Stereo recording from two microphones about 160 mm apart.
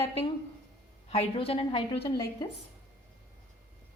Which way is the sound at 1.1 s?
35° left (ahead or behind).